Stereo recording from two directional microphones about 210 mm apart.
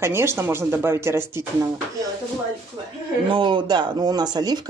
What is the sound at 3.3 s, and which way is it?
Speech, 20° right (ahead or behind).